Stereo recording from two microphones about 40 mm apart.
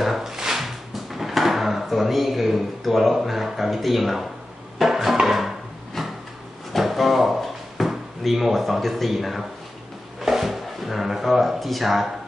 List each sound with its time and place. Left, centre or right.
0.0 s a sound: centre
1.1 s drawer open or close: centre
4.7 s music: centre
6.0 s a sound: centre
6.7 s drawer open or close: centre
10.2 s speech: centre